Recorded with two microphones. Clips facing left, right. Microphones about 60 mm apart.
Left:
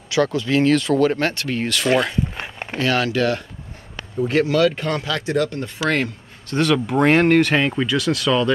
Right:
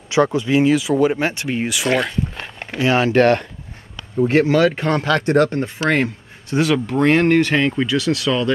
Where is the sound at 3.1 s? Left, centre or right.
Right.